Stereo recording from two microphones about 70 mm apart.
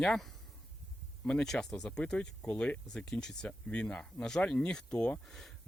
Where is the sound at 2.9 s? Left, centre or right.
Centre.